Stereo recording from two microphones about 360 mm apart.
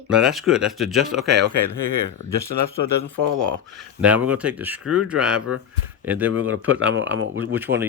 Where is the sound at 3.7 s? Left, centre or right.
Centre.